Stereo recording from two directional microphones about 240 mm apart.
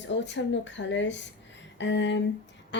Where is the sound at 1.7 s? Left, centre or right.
Left.